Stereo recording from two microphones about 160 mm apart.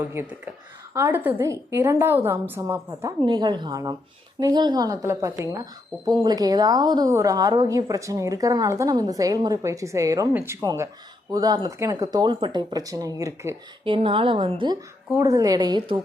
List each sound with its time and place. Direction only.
0.0 s a woman's voice: 10° right (ahead or behind)
13.8 s a woman's voice: 35° right (ahead or behind)